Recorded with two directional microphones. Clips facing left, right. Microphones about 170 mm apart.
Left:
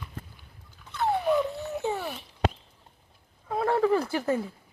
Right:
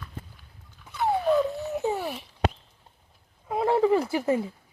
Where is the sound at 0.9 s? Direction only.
10° right (ahead or behind).